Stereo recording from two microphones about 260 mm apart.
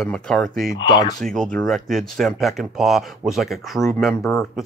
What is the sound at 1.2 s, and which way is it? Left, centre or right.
Speech, centre.